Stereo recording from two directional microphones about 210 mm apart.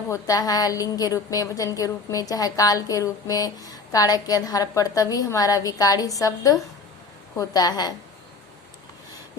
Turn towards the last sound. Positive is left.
turn(degrees=20)  # may be behind; listen again after turning